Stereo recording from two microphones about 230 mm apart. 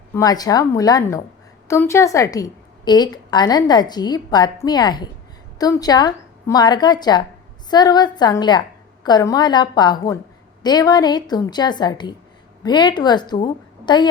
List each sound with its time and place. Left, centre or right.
0.1 s a woman's voice: centre